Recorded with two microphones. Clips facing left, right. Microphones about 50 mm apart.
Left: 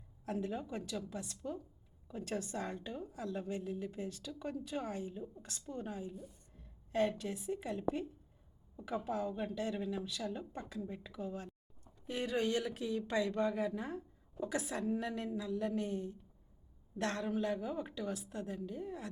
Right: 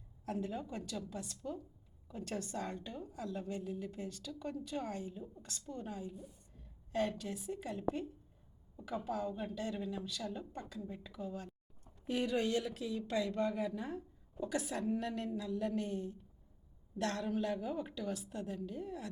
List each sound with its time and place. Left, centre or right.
0.3 s a woman's voice: centre
9.0 s a woman's voice: centre
12.5 s speech: left
14.9 s a woman's voice: centre
17.5 s a woman's voice: centre
18.5 s a woman's voice: centre
18.9 s speech: left